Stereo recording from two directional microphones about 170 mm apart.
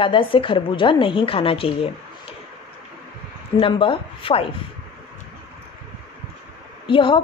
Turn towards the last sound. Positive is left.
turn(degrees=30)  # may be behind; listen again after turning